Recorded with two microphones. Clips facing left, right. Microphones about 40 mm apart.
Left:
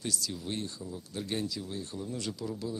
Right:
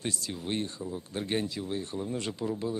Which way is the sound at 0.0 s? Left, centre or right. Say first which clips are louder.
Right 2 dB; right.